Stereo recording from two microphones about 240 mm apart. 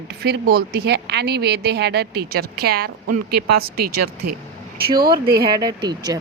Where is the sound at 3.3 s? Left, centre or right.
Right.